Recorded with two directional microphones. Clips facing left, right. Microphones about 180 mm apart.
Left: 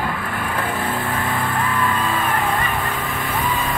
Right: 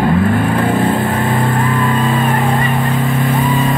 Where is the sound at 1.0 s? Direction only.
20° right (ahead or behind).